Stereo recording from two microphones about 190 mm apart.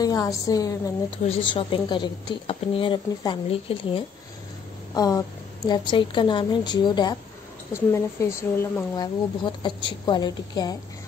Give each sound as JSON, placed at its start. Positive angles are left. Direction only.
{"t": 0.0, "sound": "speech", "side_deg": 20}